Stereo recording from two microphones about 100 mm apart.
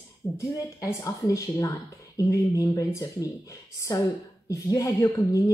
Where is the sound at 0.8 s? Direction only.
35° left (ahead or behind).